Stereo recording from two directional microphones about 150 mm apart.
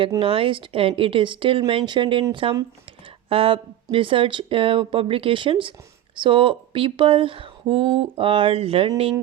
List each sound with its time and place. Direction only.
0.2 s speech: 35° right (ahead or behind)